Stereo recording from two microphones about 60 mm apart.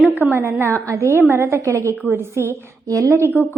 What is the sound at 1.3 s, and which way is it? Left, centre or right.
A woman's voice, right.